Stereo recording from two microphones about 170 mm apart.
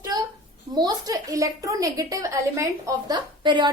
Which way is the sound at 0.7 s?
25° right (ahead or behind).